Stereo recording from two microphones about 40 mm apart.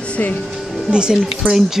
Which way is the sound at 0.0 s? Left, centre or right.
Left.